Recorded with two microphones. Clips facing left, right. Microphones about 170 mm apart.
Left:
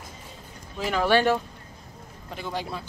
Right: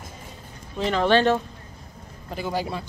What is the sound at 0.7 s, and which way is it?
Speech, 5° left (ahead or behind).